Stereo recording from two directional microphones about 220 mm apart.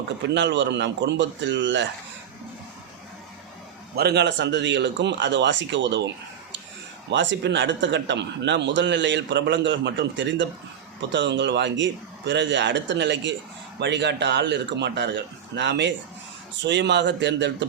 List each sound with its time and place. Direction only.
0.3 s speech: 55° right (ahead or behind)
3.9 s speech: 45° right (ahead or behind)
7.1 s speech: 55° right (ahead or behind)